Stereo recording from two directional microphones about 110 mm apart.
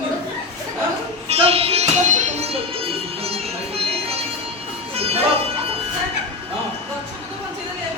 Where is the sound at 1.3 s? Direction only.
60° right (ahead or behind).